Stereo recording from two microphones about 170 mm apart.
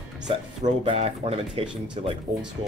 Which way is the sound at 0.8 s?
35° right (ahead or behind).